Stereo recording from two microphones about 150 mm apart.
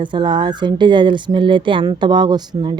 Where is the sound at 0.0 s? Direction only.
30° right (ahead or behind).